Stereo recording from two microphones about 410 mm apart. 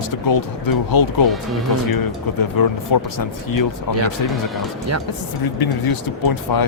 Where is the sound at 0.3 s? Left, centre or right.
Left.